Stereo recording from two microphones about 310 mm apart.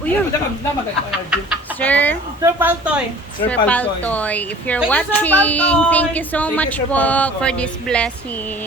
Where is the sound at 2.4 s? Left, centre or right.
Centre.